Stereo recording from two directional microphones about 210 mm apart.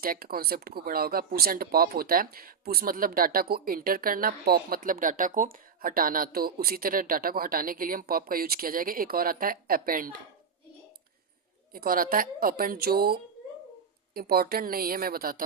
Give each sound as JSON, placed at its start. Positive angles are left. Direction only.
{"t": 0.0, "sound": "speech", "side_deg": -45}
{"t": 11.7, "sound": "speech", "side_deg": -45}